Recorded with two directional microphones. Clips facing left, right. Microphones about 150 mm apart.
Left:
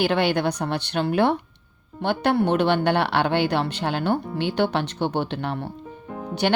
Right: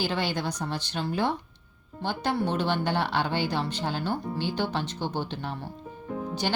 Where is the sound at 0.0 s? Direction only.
65° left (ahead or behind).